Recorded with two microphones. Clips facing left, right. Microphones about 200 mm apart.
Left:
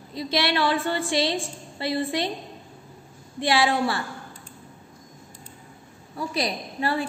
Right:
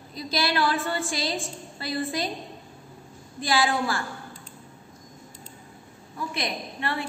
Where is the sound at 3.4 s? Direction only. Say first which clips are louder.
Left 3 dB; 25° left (ahead or behind).